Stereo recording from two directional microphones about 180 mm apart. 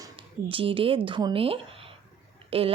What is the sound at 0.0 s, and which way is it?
Speech, 30° right (ahead or behind).